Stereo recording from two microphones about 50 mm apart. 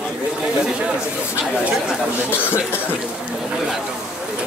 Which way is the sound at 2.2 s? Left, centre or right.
Left.